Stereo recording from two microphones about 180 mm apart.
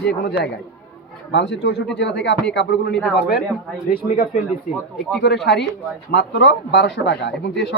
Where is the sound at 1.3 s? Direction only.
75° left (ahead or behind).